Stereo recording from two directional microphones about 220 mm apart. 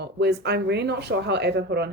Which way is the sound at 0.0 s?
50° right (ahead or behind).